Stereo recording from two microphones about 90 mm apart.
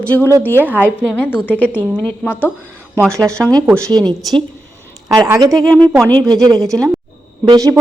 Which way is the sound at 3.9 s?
55° right (ahead or behind).